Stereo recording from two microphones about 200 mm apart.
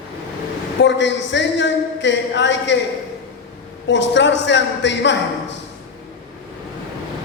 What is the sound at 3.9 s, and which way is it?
Speech, 65° left (ahead or behind).